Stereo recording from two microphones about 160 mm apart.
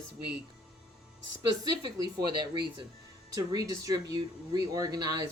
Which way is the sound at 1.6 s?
25° right (ahead or behind).